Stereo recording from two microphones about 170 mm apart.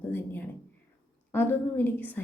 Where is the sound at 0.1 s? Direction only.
10° left (ahead or behind).